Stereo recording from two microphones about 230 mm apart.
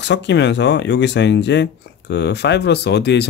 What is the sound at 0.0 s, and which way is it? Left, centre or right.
Speech, left.